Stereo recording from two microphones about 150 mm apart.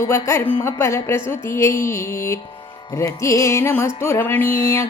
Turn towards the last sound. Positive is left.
turn(degrees=20)  # may be behind; listen again after turning